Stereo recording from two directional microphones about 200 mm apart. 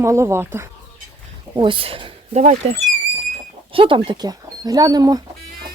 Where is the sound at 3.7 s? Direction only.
25° right (ahead or behind).